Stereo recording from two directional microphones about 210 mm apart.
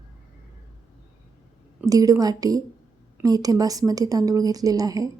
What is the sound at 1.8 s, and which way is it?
A woman's voice, 15° right (ahead or behind).